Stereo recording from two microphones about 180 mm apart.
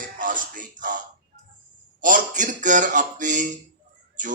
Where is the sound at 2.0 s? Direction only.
45° right (ahead or behind).